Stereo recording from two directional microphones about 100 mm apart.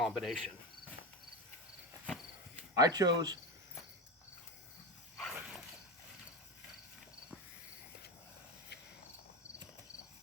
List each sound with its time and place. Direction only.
0.0 s speech: centre (ahead or behind)
2.7 s speech: 40° right (ahead or behind)
5.1 s dog: centre (ahead or behind)